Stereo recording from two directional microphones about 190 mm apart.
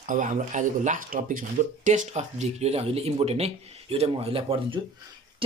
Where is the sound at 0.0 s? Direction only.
45° right (ahead or behind).